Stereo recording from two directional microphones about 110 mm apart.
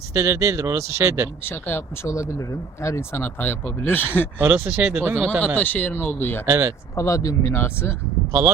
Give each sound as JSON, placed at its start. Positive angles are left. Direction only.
{"t": 0.1, "sound": "speech", "side_deg": -25}
{"t": 1.5, "sound": "speech", "side_deg": 20}
{"t": 4.4, "sound": "speech", "side_deg": -20}
{"t": 5.5, "sound": "speech", "side_deg": 15}
{"t": 6.4, "sound": "speech", "side_deg": -25}
{"t": 6.9, "sound": "speech", "side_deg": 30}